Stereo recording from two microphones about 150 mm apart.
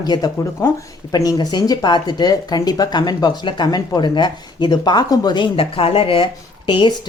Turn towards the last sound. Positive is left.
turn(degrees=30)  # may be behind; listen again after turning